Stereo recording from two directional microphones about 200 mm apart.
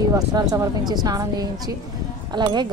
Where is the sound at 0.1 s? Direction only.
20° right (ahead or behind).